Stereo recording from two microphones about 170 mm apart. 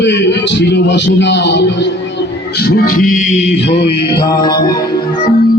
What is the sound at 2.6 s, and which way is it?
Music, 65° left (ahead or behind).